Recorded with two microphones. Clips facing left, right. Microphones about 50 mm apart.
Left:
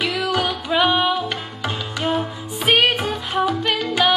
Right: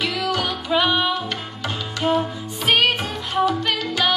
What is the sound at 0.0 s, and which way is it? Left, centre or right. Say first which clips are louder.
Music: left 2 dB; centre.